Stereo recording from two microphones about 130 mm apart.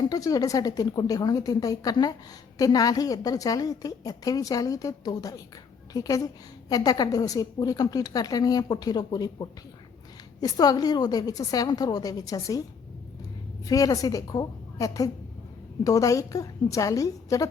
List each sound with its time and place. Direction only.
0.0 s a woman's voice: 30° left (ahead or behind)
13.7 s a woman's voice: 30° left (ahead or behind)